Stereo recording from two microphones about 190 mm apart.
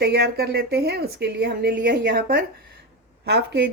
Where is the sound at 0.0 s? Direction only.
60° right (ahead or behind).